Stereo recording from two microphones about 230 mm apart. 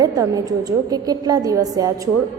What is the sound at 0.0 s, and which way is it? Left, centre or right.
A woman's voice, centre.